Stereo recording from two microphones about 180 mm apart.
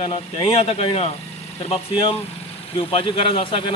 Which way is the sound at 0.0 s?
30° left (ahead or behind).